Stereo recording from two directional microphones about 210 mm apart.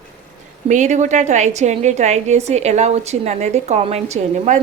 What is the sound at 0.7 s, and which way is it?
A woman's voice, 35° right (ahead or behind).